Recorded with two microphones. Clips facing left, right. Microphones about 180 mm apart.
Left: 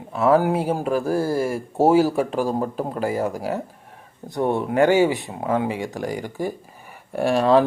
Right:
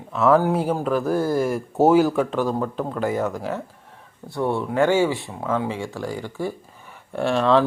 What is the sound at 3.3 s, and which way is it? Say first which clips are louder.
Speech: left 2 dB; 35° left (ahead or behind).